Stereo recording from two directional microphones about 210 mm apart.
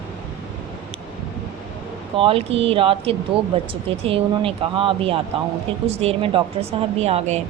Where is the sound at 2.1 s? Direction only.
25° right (ahead or behind).